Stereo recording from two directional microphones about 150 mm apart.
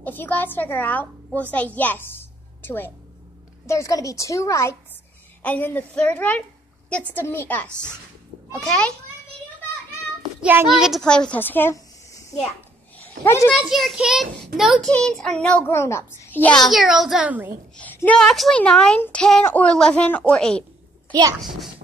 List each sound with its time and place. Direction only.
0.0 s a woman's voice: 10° left (ahead or behind)
10.4 s a child's voice: 10° right (ahead or behind)
10.8 s a child's voice: centre (ahead or behind); by 12.4 s 20° left (ahead or behind)
12.9 s a sound: 15° left (ahead or behind)
13.5 s a child's voice: 5° right (ahead or behind); by 16.5 s 15° left (ahead or behind)
16.6 s a child's voice: centre (ahead or behind)
17.7 s a child's voice: 10° left (ahead or behind)